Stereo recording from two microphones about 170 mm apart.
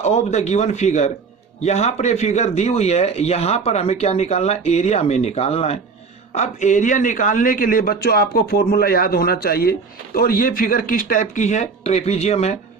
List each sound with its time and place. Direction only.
0.0 s a man's voice: 40° left (ahead or behind)